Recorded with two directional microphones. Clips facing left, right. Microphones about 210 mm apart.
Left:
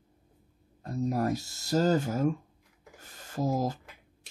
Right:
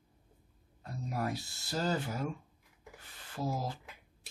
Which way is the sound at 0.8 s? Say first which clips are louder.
Left 8 dB; 40° left (ahead or behind).